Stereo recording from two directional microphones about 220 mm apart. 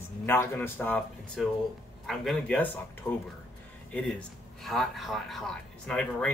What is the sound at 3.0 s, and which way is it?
Speech, 15° left (ahead or behind).